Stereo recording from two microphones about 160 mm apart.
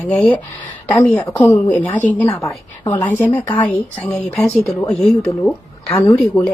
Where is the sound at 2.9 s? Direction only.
15° left (ahead or behind).